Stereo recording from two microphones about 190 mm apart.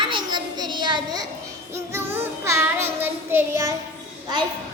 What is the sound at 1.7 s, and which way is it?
Music, 15° right (ahead or behind).